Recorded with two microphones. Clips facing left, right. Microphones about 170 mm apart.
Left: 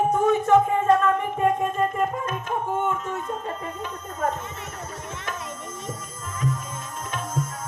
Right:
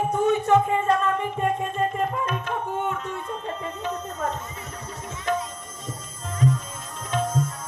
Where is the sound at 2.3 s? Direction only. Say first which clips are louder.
Left 1 dB; 45° left (ahead or behind).